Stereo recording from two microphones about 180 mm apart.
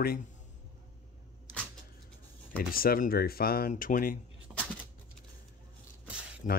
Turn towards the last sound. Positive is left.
turn(degrees=45)  # may be behind; listen again after turning